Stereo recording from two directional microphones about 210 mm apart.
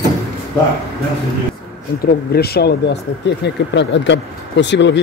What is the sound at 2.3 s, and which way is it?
Speech, 50° left (ahead or behind).